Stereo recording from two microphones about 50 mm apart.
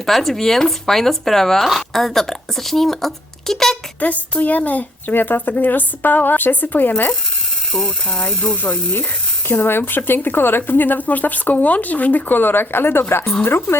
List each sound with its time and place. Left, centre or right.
0.0 s speech: centre
4.0 s speech: left
7.7 s ratchet: centre
8.6 s speech: left
9.5 s speech: left